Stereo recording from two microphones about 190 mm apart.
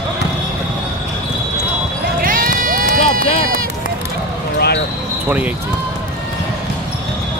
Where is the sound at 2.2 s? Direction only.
45° right (ahead or behind).